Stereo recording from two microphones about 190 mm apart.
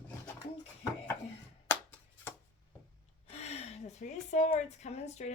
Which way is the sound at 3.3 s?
35° left (ahead or behind).